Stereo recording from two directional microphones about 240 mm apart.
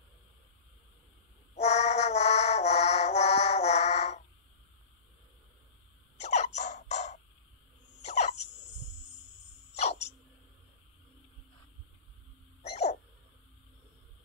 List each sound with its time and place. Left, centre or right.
1.5 s music: left
6.1 s a sound: left
9.8 s dog: left